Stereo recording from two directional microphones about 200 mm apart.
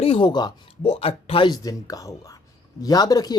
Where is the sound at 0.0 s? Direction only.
25° left (ahead or behind).